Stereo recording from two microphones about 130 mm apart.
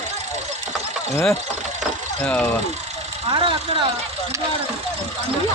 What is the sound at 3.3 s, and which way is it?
Speech, 40° right (ahead or behind).